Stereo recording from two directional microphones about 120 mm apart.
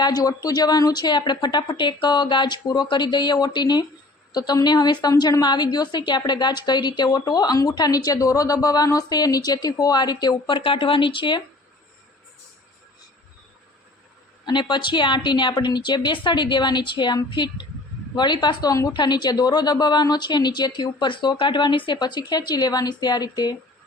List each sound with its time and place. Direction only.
0.0 s a woman's voice: 35° left (ahead or behind)
14.4 s a woman's voice: 40° left (ahead or behind)